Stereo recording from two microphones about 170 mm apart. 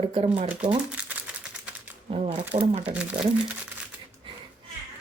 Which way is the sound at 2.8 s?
10° right (ahead or behind).